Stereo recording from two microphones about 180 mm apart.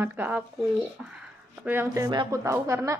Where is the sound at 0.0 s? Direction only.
10° right (ahead or behind).